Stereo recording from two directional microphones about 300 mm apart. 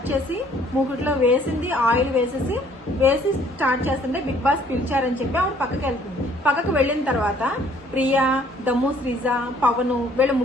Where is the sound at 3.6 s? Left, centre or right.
Centre.